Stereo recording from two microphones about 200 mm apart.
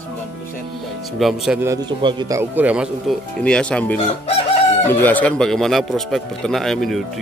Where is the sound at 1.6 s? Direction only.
20° right (ahead or behind).